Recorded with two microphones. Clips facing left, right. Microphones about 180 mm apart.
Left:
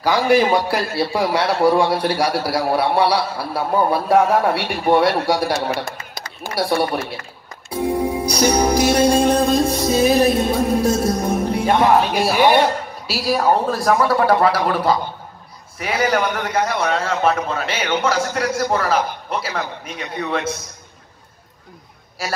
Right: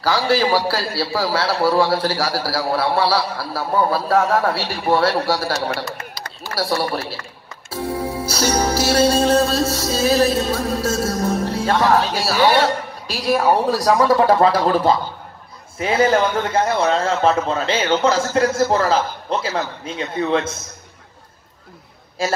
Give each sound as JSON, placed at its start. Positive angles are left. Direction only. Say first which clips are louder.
{"t": 0.3, "sound": "a man's voice", "louder": "left 3 dB", "side_deg": 20}
{"t": 6.5, "sound": "a man's voice", "louder": "left 2 dB", "side_deg": 20}
{"t": 7.7, "sound": "music", "louder": "left 4 dB", "side_deg": 20}
{"t": 12.3, "sound": "a man's voice", "louder": "even", "side_deg": 15}
{"t": 13.5, "sound": "a man's voice", "louder": "even", "side_deg": -15}